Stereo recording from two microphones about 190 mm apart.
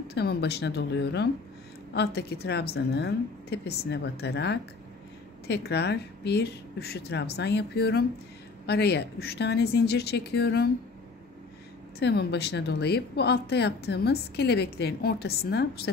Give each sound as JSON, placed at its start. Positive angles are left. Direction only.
{"t": 0.1, "sound": "a woman's voice", "side_deg": 60}
{"t": 12.0, "sound": "a woman's voice", "side_deg": 60}